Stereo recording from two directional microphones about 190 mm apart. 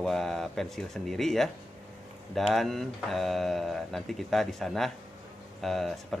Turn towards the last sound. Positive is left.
turn(degrees=0)  # may be behind; listen again after turning